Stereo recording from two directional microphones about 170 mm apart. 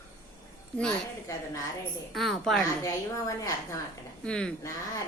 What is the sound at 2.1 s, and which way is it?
Speech, centre (ahead or behind).